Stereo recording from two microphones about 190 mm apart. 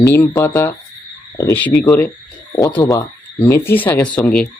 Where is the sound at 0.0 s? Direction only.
15° left (ahead or behind).